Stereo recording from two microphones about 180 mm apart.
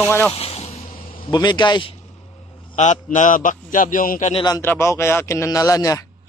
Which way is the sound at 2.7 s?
45° left (ahead or behind).